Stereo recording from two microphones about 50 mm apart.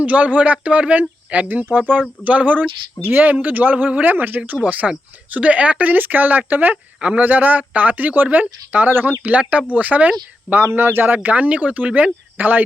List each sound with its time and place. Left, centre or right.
0.0 s speech: right
7.0 s speech: right
7.3 s speech: right
9.2 s speech: right
10.5 s speech: right